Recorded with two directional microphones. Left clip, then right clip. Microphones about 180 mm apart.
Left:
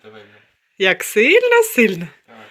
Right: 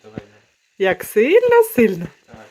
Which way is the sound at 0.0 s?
15° left (ahead or behind).